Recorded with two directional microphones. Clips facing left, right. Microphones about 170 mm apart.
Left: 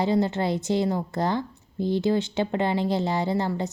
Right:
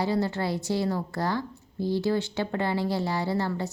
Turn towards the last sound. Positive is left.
turn(degrees=20)  # may be behind; listen again after turning